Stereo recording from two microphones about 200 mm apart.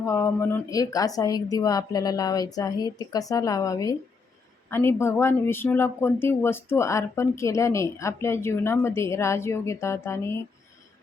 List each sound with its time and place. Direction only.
0.0 s speech: 15° left (ahead or behind)